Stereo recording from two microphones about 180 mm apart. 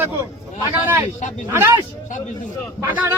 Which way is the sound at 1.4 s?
15° right (ahead or behind).